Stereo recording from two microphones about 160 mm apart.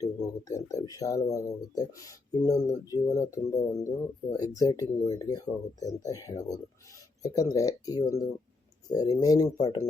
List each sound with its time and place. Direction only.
0.0 s speech: 20° left (ahead or behind)